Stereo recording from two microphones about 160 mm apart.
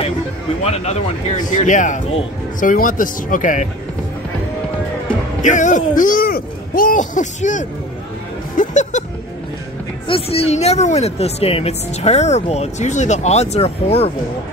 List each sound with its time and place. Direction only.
0.7 s speech: 45° left (ahead or behind)
5.4 s speech: 50° left (ahead or behind)
10.0 s speech: 35° left (ahead or behind)